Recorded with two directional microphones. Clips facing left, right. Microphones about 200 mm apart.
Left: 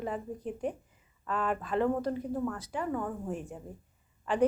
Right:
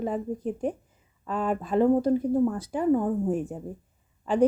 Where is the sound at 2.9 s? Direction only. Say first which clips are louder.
Right 13 dB; 25° right (ahead or behind).